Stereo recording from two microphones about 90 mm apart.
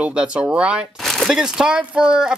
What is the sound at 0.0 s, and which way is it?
Speech, 10° right (ahead or behind).